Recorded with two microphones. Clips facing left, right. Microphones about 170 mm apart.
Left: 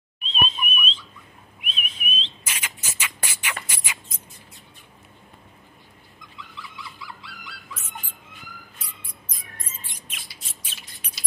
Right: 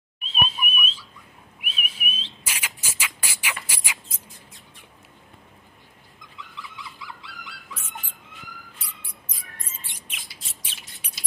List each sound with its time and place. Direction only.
0.2 s a sound: 10° right (ahead or behind)
1.6 s rodents: 10° right (ahead or behind)
9.3 s music: 10° right (ahead or behind)
9.9 s rodents: 10° right (ahead or behind)